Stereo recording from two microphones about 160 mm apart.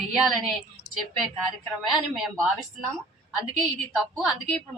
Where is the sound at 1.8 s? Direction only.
Centre (ahead or behind).